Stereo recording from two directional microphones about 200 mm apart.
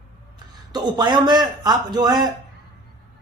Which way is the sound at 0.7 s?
20° right (ahead or behind).